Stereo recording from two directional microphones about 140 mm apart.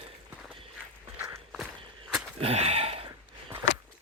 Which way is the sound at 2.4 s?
50° right (ahead or behind).